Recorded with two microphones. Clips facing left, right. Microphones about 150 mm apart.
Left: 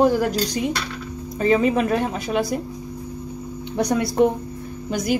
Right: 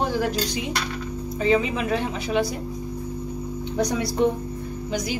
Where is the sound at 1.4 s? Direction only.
50° left (ahead or behind).